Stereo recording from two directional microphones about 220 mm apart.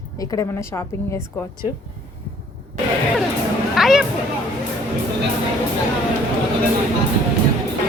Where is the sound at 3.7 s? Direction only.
Centre (ahead or behind).